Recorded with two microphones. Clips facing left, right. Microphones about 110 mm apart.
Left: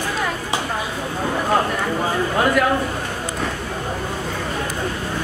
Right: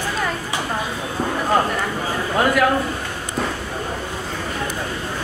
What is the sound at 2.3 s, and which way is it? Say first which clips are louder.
Speech: right 2 dB; centre (ahead or behind).